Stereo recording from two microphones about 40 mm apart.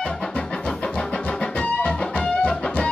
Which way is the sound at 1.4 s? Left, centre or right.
Left.